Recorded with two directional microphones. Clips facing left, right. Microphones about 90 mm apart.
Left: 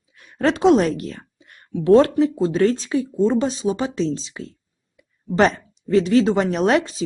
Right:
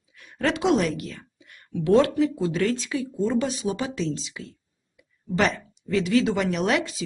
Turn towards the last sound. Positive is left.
turn(degrees=35)  # may be behind; listen again after turning